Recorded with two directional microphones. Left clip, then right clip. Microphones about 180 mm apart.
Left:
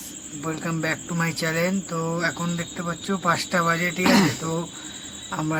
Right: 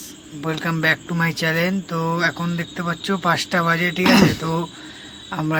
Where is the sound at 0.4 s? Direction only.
20° right (ahead or behind).